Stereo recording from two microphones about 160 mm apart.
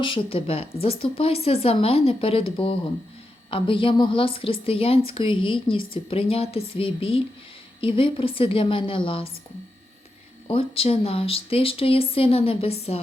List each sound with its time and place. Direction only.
0.0 s speech: 35° left (ahead or behind)
10.5 s speech: 35° left (ahead or behind)